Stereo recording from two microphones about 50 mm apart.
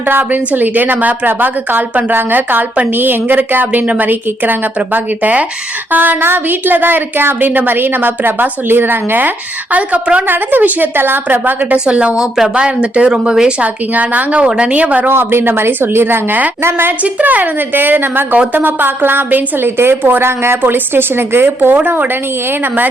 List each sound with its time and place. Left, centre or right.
0.1 s speech: right
9.7 s speech: right
10.2 s speech: right
11.9 s speech: right
12.1 s speech: centre
13.6 s speech: right
15.0 s a woman's voice: right
17.0 s a woman's voice: right
20.6 s a woman's voice: right